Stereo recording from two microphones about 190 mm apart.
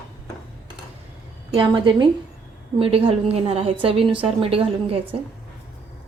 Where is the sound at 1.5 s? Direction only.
25° right (ahead or behind).